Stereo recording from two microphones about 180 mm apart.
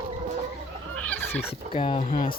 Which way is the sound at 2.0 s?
50° left (ahead or behind).